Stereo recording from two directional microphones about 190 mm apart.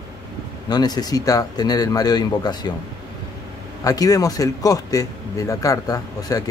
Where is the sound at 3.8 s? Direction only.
20° left (ahead or behind).